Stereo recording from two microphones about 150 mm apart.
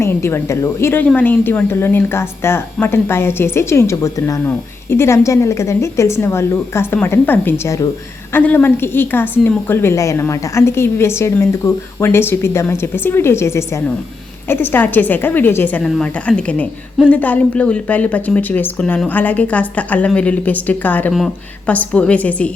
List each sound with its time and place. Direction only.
0.0 s a woman's voice: 15° left (ahead or behind)